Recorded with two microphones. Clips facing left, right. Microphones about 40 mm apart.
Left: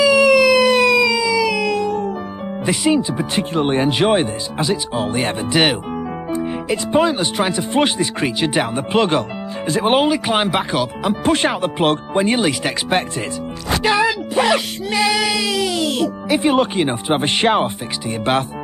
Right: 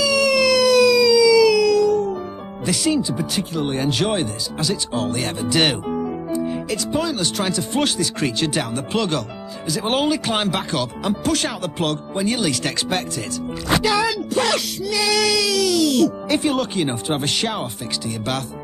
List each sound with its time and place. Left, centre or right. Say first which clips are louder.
0.0 s a sound: left 5 dB; left
2.6 s speech: left 3 dB; left
6.7 s speech: left 9 dB; left
11.2 s speech: left 8 dB; left
13.8 s music: left 3 dB; left
16.3 s speech: left 6 dB; left